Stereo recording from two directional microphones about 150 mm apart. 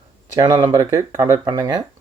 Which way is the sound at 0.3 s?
30° right (ahead or behind).